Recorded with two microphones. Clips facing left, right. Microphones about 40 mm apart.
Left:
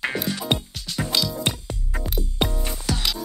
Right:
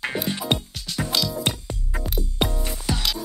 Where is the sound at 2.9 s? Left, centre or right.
Centre.